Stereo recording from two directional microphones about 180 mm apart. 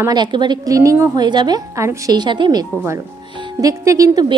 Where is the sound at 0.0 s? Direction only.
25° right (ahead or behind).